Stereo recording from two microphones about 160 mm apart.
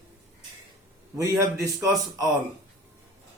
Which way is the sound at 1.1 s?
20° right (ahead or behind).